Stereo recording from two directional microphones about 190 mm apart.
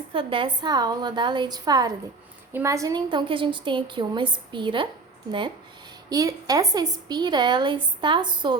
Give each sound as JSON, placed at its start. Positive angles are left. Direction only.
{"t": 0.1, "sound": "a woman's voice", "side_deg": -25}
{"t": 6.1, "sound": "a woman's voice", "side_deg": -20}